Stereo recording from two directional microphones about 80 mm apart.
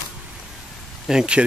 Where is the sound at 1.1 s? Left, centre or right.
Centre.